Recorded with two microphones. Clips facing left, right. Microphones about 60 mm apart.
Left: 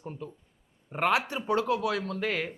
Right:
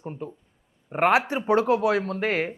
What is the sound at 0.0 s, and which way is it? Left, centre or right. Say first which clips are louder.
Speech: right 5 dB; right.